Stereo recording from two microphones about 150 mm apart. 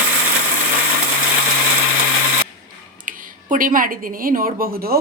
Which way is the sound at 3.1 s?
65° right (ahead or behind).